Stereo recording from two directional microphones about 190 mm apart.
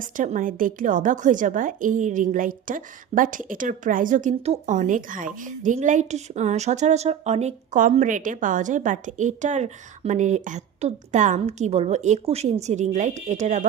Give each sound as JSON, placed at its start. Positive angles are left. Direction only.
{"t": 0.0, "sound": "a woman's voice", "side_deg": -45}